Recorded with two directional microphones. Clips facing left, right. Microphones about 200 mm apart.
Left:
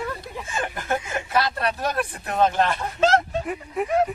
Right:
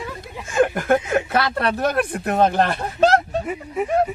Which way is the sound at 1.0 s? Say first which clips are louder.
Right 4 dB; 60° right (ahead or behind).